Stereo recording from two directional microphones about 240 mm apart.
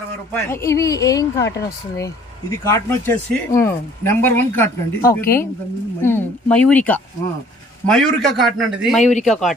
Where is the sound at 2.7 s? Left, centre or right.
Centre.